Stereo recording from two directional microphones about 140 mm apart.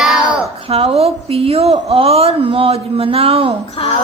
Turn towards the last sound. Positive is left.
turn(degrees=40)  # may be behind; listen again after turning